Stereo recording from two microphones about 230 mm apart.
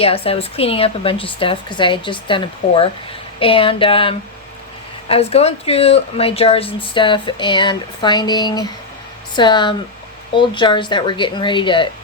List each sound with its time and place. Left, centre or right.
0.0 s a woman's voice: left